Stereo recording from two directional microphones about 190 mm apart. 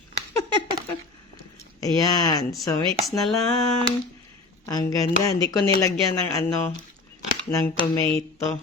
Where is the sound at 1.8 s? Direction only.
20° left (ahead or behind).